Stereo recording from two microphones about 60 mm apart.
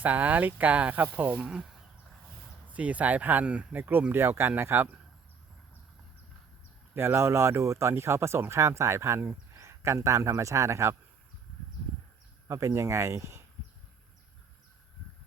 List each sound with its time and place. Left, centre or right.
0.0 s speech: right
2.6 s speech: right
3.8 s speech: right
6.9 s speech: right
12.5 s speech: right